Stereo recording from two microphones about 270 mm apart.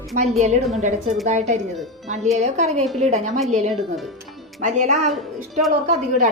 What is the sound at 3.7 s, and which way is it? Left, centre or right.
Speech, centre.